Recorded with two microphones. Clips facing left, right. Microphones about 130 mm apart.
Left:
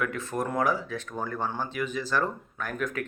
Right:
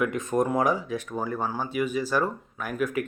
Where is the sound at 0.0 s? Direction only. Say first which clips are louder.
Right 5 dB; 15° right (ahead or behind).